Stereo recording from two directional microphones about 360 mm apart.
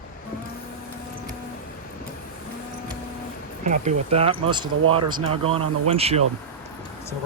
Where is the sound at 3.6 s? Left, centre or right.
Centre.